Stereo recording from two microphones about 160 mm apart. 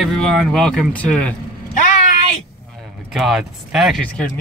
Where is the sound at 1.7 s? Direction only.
50° left (ahead or behind).